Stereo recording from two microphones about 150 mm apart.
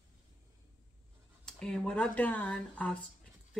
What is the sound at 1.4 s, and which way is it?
Speech, 5° left (ahead or behind).